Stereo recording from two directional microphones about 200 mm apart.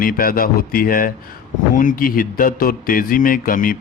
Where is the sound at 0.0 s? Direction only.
45° left (ahead or behind).